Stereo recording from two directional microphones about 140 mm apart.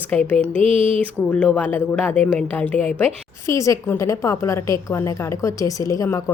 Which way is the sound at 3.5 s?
20° left (ahead or behind).